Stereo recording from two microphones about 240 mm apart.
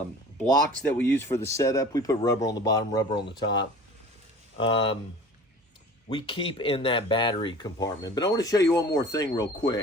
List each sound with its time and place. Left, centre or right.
0.9 s speech: centre
6.1 s speech: left